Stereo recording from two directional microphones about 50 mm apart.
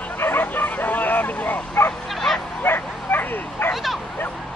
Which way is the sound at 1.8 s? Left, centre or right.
Left.